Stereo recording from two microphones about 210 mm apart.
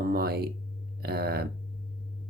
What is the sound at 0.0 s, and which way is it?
Speech, 45° right (ahead or behind).